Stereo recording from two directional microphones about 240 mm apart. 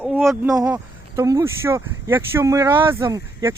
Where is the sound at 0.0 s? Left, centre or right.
Centre.